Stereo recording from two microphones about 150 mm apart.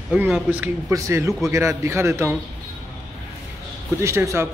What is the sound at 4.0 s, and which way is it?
Speech, 20° right (ahead or behind).